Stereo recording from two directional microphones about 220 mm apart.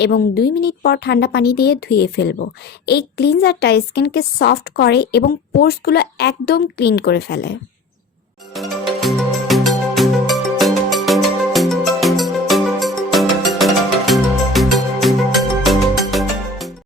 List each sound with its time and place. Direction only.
0.0 s speech: 45° left (ahead or behind)
8.5 s music: centre (ahead or behind)